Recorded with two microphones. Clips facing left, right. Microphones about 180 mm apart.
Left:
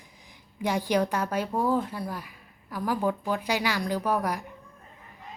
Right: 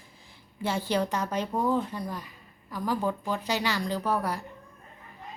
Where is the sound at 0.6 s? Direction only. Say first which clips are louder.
Left 2 dB; 15° left (ahead or behind).